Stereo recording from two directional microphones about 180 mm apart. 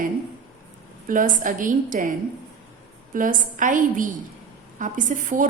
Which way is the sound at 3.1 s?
45° right (ahead or behind).